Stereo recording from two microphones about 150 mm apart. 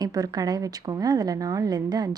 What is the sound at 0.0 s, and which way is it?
Speech, 25° right (ahead or behind).